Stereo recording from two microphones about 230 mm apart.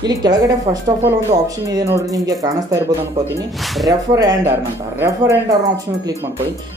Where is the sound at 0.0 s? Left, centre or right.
Centre.